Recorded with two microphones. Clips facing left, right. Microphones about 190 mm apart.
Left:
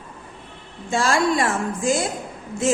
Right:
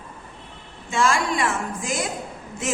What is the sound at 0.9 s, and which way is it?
A woman's voice, 35° left (ahead or behind).